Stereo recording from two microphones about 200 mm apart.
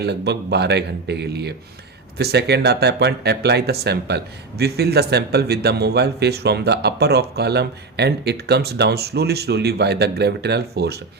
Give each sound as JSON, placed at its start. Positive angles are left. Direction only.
{"t": 0.0, "sound": "speech", "side_deg": -55}